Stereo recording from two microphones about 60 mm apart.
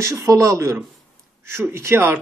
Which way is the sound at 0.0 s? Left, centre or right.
Right.